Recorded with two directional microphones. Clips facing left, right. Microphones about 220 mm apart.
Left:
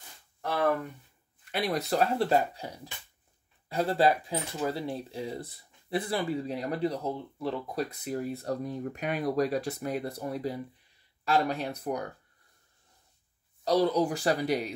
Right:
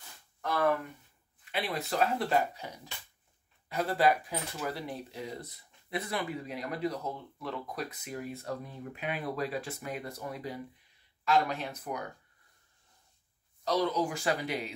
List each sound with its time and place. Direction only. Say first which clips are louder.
1.5 s speech: left 5 dB; 40° left (ahead or behind)
13.7 s speech: left 5 dB; 35° left (ahead or behind)